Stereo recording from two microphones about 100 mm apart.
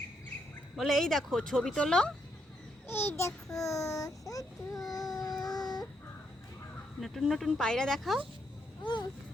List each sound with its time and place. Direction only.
0.8 s a woman's voice: centre (ahead or behind)
2.8 s a child's voice: 20° left (ahead or behind)
4.9 s a sound: 40° left (ahead or behind)
7.0 s a woman's voice: centre (ahead or behind)
8.8 s speech: 50° left (ahead or behind)